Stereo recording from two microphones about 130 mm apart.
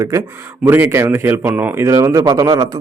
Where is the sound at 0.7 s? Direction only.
20° right (ahead or behind).